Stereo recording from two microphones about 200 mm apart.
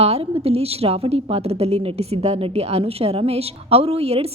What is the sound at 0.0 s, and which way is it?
A woman's voice, 30° right (ahead or behind).